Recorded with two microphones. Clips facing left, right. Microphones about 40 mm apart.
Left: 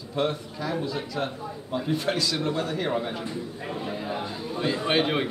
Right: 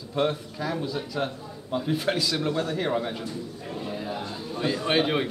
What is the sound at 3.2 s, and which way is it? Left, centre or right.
Speech, left.